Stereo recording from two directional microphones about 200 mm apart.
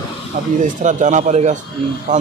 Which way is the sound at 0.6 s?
40° right (ahead or behind).